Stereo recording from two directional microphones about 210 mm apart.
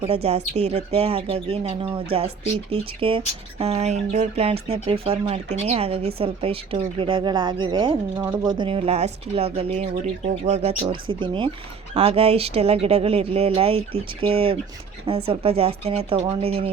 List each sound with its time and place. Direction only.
0.0 s speech: 30° right (ahead or behind)
3.0 s speech: 25° right (ahead or behind)